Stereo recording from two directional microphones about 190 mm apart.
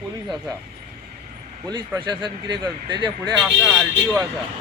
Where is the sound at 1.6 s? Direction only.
20° right (ahead or behind).